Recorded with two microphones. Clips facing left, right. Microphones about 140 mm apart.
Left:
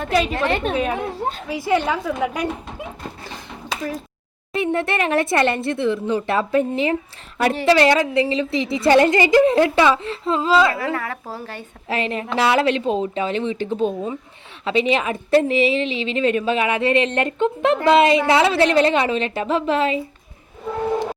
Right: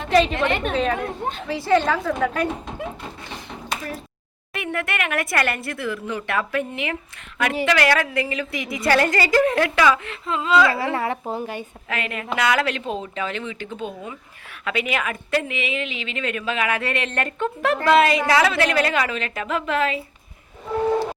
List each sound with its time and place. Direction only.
0.1 s a woman's voice: 5° left (ahead or behind)
0.3 s speech: 35° left (ahead or behind)
0.7 s a woman's voice: 10° left (ahead or behind)
4.5 s a woman's voice: 30° left (ahead or behind)
10.8 s speech: 25° right (ahead or behind)
11.9 s a woman's voice: 30° left (ahead or behind)
13.7 s a woman's voice: 40° left (ahead or behind)